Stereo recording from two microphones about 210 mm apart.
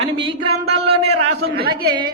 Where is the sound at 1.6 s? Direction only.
45° right (ahead or behind).